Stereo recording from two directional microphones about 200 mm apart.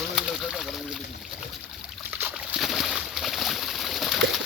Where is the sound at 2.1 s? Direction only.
10° right (ahead or behind).